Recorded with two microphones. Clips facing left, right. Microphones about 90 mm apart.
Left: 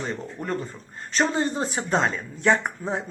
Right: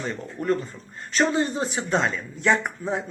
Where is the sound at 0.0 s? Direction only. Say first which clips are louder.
Right 2 dB; 35° left (ahead or behind).